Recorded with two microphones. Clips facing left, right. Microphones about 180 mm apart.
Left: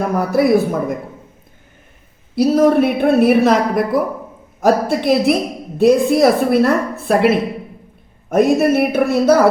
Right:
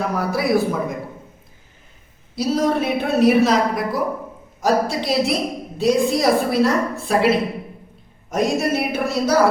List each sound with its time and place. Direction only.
0.0 s a man's voice: 50° left (ahead or behind)
2.3 s a woman's voice: 55° left (ahead or behind)